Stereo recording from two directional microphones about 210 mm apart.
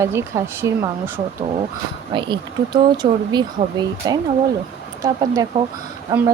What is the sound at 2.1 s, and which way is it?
Speech, 20° right (ahead or behind).